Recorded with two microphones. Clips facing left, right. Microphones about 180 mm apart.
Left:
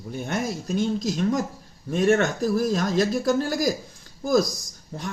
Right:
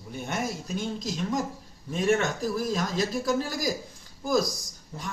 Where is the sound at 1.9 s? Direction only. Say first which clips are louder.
Left 5 dB; 50° left (ahead or behind).